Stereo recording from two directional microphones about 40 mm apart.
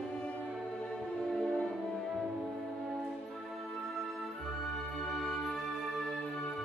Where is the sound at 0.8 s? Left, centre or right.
Centre.